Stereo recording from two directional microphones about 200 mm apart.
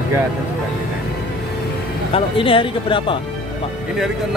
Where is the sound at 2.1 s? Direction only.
25° left (ahead or behind).